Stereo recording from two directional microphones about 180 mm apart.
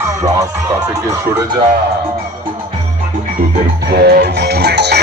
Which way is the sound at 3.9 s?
65° right (ahead or behind).